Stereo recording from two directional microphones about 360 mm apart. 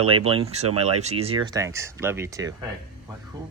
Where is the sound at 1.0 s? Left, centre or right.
Centre.